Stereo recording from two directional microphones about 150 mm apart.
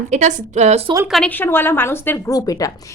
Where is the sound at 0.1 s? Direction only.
50° right (ahead or behind).